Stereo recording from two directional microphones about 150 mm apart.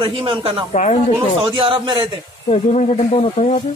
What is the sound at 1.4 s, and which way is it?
Speech, 35° right (ahead or behind).